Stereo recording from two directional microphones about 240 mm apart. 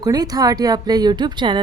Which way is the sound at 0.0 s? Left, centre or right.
Centre.